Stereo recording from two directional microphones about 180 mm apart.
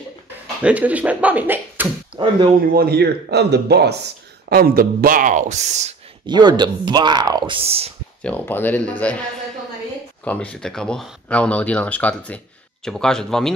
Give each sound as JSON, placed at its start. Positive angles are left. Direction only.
{"t": 0.6, "sound": "speech", "side_deg": -10}
{"t": 2.2, "sound": "speech", "side_deg": -25}
{"t": 2.6, "sound": "speech", "side_deg": -55}
{"t": 6.2, "sound": "speech", "side_deg": -25}
{"t": 8.2, "sound": "speech", "side_deg": 10}
{"t": 10.2, "sound": "a man's voice", "side_deg": 5}